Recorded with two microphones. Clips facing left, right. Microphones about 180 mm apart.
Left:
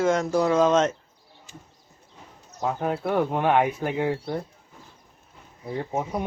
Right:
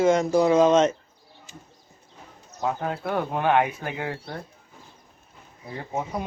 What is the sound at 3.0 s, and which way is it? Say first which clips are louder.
Speech: left 1 dB; centre (ahead or behind).